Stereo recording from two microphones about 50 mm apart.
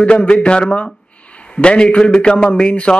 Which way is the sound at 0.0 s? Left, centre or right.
Left.